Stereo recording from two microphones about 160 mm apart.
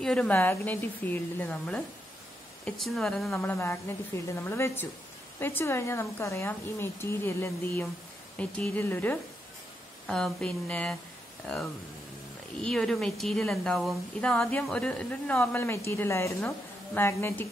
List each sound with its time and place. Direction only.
0.0 s a woman's voice: 5° left (ahead or behind)
3.4 s a woman's voice: 15° left (ahead or behind)
12.6 s a woman's voice: 5° left (ahead or behind)